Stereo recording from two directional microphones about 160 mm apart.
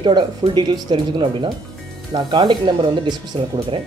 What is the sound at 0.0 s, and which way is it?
Speech, 30° right (ahead or behind).